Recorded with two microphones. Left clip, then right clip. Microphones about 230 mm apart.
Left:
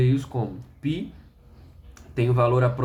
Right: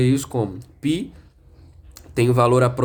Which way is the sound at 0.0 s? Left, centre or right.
Right.